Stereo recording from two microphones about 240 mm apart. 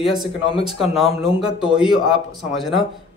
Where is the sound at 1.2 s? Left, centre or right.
Centre.